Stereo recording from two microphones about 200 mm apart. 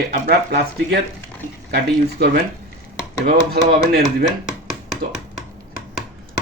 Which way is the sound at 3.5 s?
50° right (ahead or behind).